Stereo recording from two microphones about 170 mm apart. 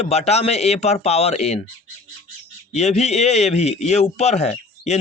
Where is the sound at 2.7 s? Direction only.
40° left (ahead or behind).